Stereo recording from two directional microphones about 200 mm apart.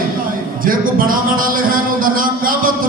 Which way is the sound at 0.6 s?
45° right (ahead or behind).